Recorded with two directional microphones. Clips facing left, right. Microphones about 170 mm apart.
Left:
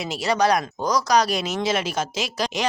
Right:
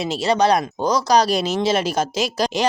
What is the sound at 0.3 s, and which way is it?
Speech, 25° right (ahead or behind).